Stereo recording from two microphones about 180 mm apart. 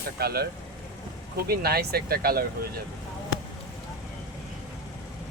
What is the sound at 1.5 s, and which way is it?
Speech, 60° right (ahead or behind).